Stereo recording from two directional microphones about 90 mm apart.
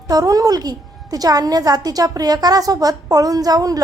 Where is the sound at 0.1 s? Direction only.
40° right (ahead or behind).